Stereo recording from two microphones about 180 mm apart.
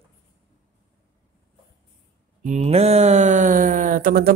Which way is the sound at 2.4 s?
35° right (ahead or behind).